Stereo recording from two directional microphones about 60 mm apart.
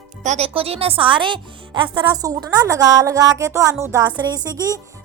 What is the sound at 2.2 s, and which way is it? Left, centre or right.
A woman's voice, right.